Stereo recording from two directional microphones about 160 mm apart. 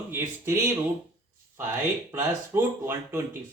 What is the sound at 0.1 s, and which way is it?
Speech, 15° right (ahead or behind).